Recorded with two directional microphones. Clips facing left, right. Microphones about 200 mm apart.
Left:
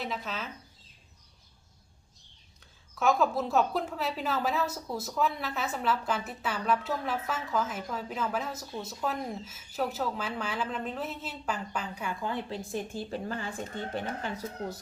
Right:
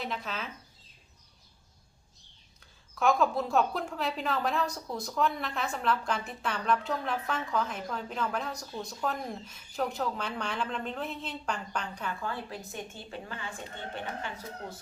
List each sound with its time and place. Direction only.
0.0 s a woman's voice: centre (ahead or behind)
2.6 s a woman's voice: centre (ahead or behind)
12.2 s a woman's voice: 20° left (ahead or behind)
12.7 s speech: 35° left (ahead or behind)